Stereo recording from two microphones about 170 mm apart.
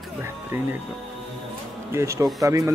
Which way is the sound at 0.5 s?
15° right (ahead or behind).